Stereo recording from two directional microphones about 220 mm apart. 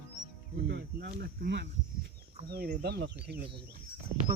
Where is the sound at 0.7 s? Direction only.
45° right (ahead or behind).